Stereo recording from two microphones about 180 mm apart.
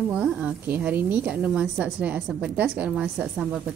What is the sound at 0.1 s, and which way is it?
A woman's voice, 5° right (ahead or behind).